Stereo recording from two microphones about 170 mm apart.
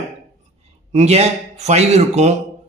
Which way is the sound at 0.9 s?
40° right (ahead or behind).